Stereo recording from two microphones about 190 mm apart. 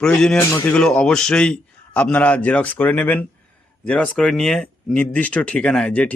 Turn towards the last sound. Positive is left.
turn(degrees=5)  # may be behind; listen again after turning